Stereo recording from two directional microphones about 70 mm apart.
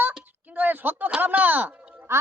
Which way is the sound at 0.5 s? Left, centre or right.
Right.